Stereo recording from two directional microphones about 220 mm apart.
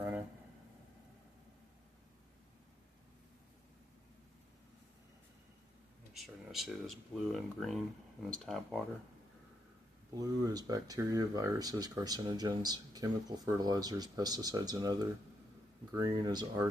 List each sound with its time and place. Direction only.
6.1 s speech: centre (ahead or behind)
10.2 s speech: 15° right (ahead or behind)